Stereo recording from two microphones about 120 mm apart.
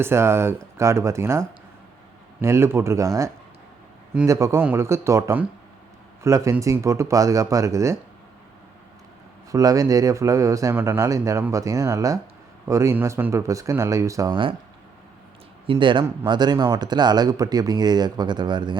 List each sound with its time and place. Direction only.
0.0 s speech: 20° right (ahead or behind)
9.5 s speech: 30° right (ahead or behind)
15.6 s speech: 45° right (ahead or behind)